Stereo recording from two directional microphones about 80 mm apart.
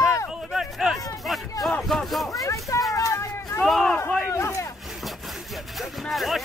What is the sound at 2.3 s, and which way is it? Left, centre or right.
Speech, left.